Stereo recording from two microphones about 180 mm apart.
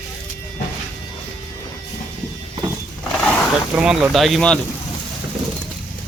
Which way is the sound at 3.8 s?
5° right (ahead or behind).